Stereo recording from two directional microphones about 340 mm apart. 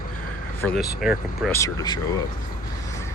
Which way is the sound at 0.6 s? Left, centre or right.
Centre.